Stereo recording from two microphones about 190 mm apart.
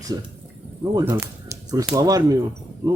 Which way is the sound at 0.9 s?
15° right (ahead or behind).